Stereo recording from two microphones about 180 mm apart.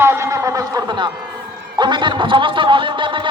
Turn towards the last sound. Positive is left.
turn(degrees=-25)  # may be behind; listen again after turning